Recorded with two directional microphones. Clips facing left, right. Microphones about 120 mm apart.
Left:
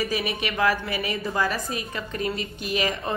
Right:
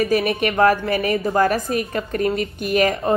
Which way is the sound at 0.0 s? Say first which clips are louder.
Right 8 dB; 50° right (ahead or behind).